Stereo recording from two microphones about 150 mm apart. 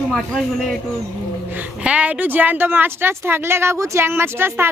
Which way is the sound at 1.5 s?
10° right (ahead or behind).